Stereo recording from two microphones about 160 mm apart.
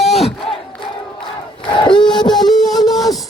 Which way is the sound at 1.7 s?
30° left (ahead or behind).